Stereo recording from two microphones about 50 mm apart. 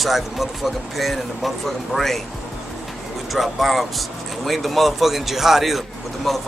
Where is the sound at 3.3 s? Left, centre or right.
Centre.